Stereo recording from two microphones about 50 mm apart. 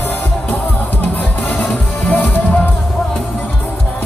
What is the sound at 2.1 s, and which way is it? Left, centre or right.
Music, left.